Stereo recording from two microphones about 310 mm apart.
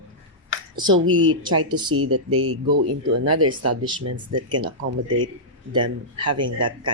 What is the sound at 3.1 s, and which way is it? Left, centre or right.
Speech, right.